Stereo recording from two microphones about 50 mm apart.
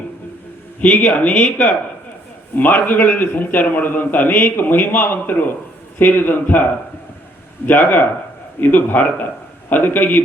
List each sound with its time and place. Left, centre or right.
0.8 s a man's voice: left
1.3 s speech: centre
2.6 s a man's voice: left
7.7 s a man's voice: left